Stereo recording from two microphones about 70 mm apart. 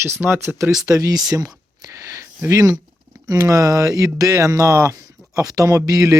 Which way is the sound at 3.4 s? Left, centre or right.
Right.